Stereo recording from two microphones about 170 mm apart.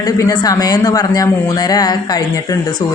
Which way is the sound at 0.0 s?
20° left (ahead or behind).